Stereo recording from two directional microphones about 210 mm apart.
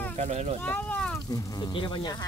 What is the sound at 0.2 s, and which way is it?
Speech, 30° right (ahead or behind).